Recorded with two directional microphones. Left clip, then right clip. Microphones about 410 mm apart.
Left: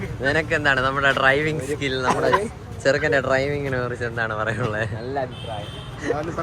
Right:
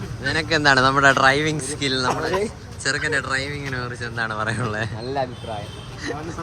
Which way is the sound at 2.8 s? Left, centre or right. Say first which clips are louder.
Left 3 dB; centre.